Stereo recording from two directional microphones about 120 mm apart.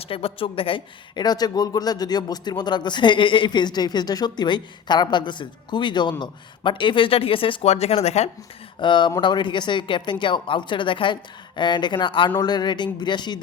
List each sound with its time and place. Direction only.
0.0 s speech: 55° left (ahead or behind)
8.8 s speech: 40° left (ahead or behind)